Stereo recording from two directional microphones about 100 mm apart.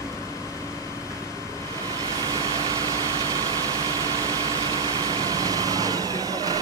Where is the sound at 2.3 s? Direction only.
40° right (ahead or behind).